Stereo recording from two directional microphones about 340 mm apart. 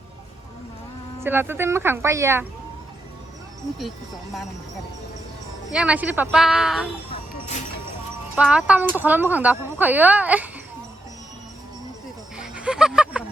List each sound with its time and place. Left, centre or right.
1.2 s speech: centre
5.7 s speech: centre
7.1 s music: centre
8.4 s speech: centre
12.4 s a sound: centre